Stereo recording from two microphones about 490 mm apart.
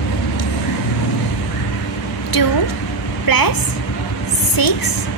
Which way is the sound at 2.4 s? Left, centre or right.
Left.